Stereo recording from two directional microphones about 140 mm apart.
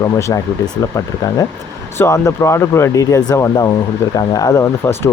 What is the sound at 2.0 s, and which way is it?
Speech, 20° left (ahead or behind).